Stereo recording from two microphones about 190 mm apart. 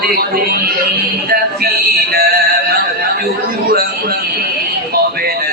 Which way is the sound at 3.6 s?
55° right (ahead or behind).